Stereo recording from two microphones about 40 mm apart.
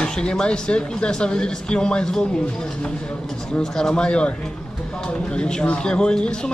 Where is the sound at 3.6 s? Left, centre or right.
Centre.